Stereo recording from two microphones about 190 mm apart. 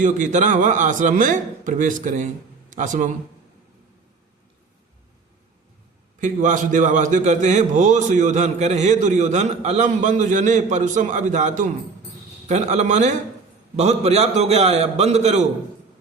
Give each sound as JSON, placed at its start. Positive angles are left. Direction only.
{"t": 0.0, "sound": "a man's voice", "side_deg": -40}
{"t": 6.1, "sound": "a man's voice", "side_deg": -40}